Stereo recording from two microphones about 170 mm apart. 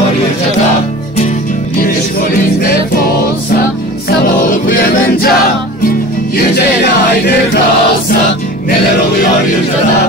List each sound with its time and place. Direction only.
4.2 s music: 60° left (ahead or behind)
6.3 s music: 70° left (ahead or behind)